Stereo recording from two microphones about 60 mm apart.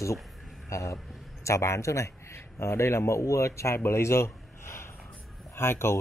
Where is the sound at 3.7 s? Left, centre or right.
Left.